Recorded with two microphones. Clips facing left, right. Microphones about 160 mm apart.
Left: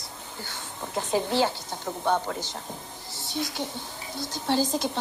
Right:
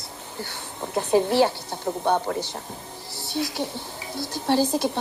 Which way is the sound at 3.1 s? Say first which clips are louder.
Right 4 dB; 65° right (ahead or behind).